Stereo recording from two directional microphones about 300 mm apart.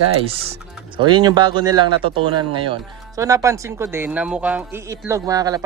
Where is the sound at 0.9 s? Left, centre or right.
Centre.